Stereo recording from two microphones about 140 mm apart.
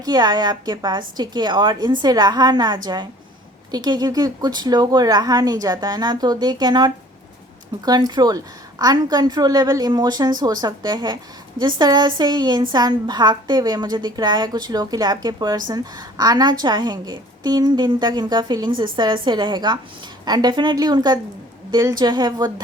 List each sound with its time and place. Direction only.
0.0 s a woman's voice: 30° right (ahead or behind)